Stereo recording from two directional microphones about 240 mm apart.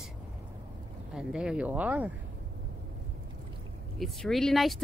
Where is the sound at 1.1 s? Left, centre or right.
Centre.